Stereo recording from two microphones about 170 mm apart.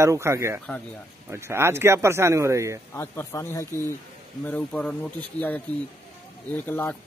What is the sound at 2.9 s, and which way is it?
Speech, 15° left (ahead or behind).